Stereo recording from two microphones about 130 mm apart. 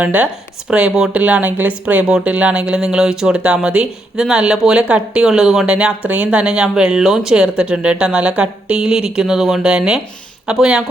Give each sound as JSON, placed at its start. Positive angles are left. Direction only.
{"t": 0.0, "sound": "speech", "side_deg": -10}